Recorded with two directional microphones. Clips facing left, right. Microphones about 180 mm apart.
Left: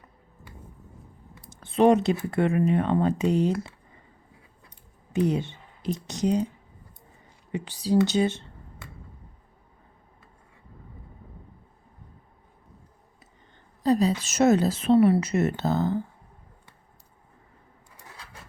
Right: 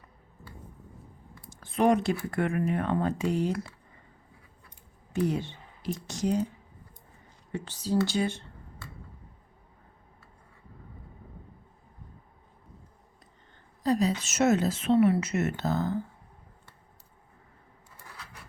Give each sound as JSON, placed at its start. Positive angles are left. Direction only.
{"t": 1.4, "sound": "speech", "side_deg": 25}
{"t": 5.1, "sound": "speech", "side_deg": 20}
{"t": 7.5, "sound": "speech", "side_deg": 15}
{"t": 13.8, "sound": "a woman's voice", "side_deg": 30}